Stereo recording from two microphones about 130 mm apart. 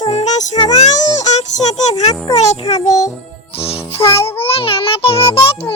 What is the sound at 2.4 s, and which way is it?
Music, 60° left (ahead or behind).